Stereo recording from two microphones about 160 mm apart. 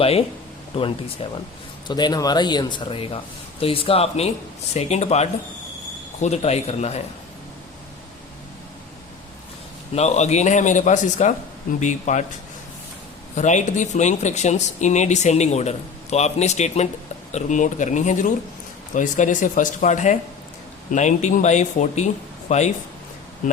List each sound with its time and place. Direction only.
0.0 s a man's voice: 40° left (ahead or behind)
9.9 s speech: 45° left (ahead or behind)
13.3 s speech: 50° left (ahead or behind)